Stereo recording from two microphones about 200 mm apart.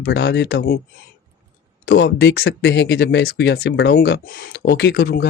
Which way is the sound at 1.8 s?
60° left (ahead or behind).